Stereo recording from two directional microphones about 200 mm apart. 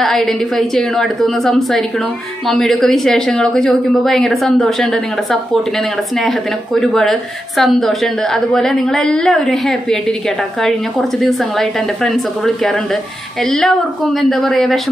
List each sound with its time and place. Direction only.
0.0 s a woman's voice: centre (ahead or behind)